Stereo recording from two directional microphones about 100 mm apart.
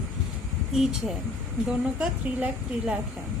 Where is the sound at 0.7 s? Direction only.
5° right (ahead or behind).